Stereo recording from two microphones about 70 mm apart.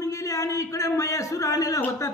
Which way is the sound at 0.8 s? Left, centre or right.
Left.